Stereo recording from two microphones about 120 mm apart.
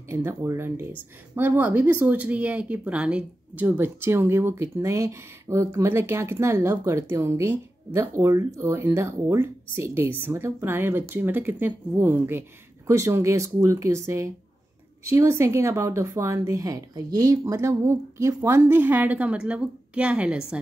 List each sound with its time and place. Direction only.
0.1 s speech: 20° right (ahead or behind)